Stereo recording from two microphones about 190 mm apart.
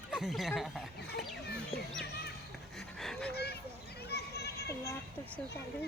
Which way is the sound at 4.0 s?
60° left (ahead or behind).